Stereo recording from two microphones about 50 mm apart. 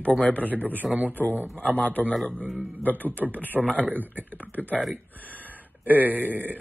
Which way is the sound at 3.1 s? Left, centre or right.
Right.